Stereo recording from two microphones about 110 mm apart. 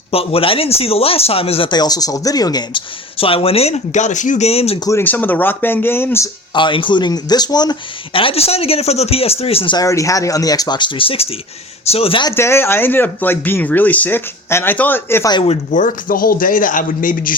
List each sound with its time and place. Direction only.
0.1 s speech: 60° left (ahead or behind)
1.7 s speech: 35° left (ahead or behind)
3.2 s speech: 55° left (ahead or behind)
4.9 s speech: 20° left (ahead or behind)
6.5 s speech: 45° left (ahead or behind)
8.1 s speech: 60° left (ahead or behind)
9.7 s speech: 30° left (ahead or behind); by 12.2 s 60° left (ahead or behind)
12.3 s speech: 20° left (ahead or behind)
15.2 s speech: 40° left (ahead or behind)